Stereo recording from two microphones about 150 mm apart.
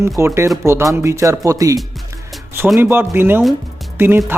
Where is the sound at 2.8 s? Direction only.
15° right (ahead or behind).